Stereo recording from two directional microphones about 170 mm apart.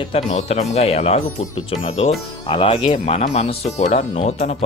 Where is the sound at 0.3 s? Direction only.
40° left (ahead or behind).